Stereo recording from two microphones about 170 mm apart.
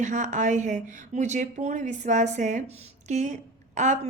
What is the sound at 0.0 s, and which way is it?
A woman's voice, 45° right (ahead or behind).